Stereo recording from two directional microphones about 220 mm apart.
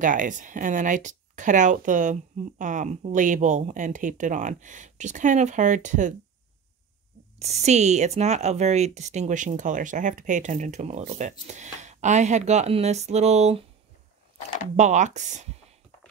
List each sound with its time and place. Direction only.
0.0 s speech: 35° right (ahead or behind)
7.3 s speech: 30° right (ahead or behind)
14.8 s speech: 35° right (ahead or behind)